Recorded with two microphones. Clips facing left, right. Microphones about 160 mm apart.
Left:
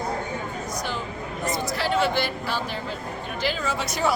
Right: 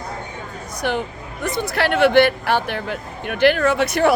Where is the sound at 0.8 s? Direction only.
65° right (ahead or behind).